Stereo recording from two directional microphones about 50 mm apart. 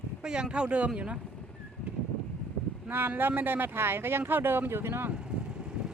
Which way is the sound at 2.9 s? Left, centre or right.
Right.